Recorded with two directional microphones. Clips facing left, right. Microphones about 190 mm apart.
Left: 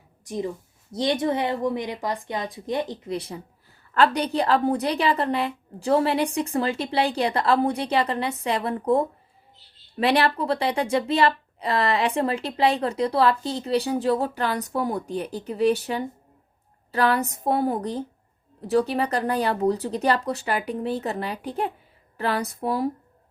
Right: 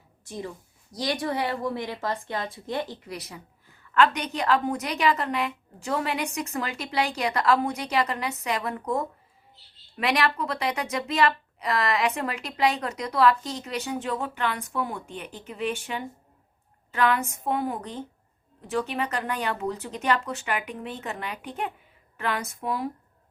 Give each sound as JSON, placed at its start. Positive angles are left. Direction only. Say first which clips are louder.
{"t": 0.3, "sound": "a woman's voice", "louder": "left 7 dB", "side_deg": 20}